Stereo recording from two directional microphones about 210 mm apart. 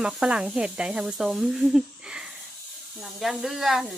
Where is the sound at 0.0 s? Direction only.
5° right (ahead or behind).